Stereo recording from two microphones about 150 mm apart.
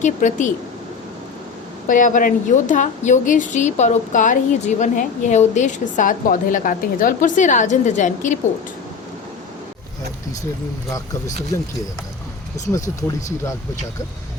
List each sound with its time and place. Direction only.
0.0 s a woman's voice: 55° left (ahead or behind)
1.9 s a woman's voice: 60° left (ahead or behind)